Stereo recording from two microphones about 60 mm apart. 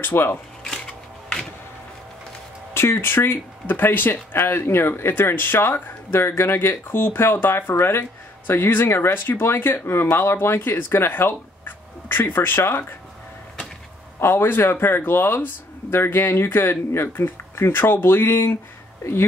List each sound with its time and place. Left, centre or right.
0.0 s speech: left
2.7 s speech: left
14.2 s speech: left